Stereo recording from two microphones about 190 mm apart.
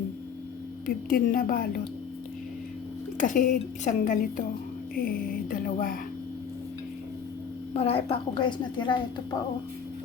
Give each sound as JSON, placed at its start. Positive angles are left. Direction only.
{"t": 0.9, "sound": "a woman's voice", "side_deg": 50}
{"t": 3.2, "sound": "a woman's voice", "side_deg": 45}
{"t": 7.7, "sound": "a woman's voice", "side_deg": 30}